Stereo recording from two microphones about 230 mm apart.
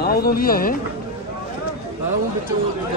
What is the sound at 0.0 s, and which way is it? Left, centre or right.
Speech, left.